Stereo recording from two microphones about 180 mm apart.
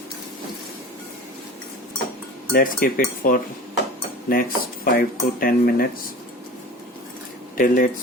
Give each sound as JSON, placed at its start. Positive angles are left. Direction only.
{"t": 2.5, "sound": "speech", "side_deg": 50}
{"t": 7.5, "sound": "speech", "side_deg": 50}